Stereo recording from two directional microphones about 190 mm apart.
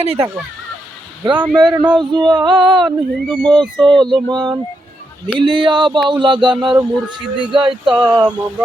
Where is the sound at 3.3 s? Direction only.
5° left (ahead or behind).